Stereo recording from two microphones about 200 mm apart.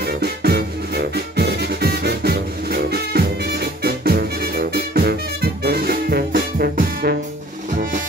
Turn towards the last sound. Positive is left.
turn(degrees=-45)  # may be behind; listen again after turning